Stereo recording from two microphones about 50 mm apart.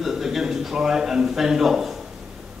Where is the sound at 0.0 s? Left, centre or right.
Centre.